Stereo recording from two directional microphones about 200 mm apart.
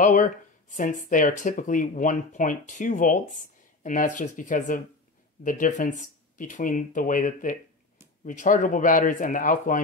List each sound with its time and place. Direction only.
0.0 s speech: 40° left (ahead or behind)